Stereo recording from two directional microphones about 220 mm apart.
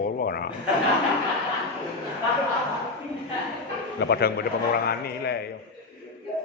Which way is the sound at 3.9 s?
50° left (ahead or behind).